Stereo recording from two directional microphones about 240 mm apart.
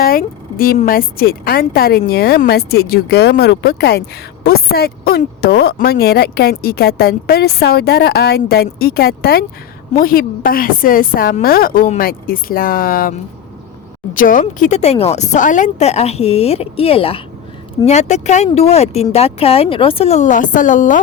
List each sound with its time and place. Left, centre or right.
0.0 s a woman's voice: left